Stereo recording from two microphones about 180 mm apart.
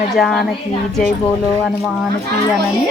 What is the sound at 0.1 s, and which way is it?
Music, centre (ahead or behind).